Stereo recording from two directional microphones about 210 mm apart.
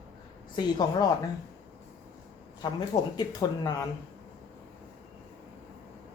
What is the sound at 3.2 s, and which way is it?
Speech, 20° left (ahead or behind).